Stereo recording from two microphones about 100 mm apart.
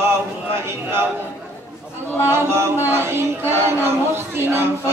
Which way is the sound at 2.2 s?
25° right (ahead or behind).